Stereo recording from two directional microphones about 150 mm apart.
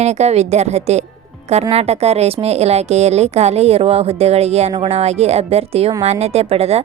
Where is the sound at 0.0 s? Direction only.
45° right (ahead or behind).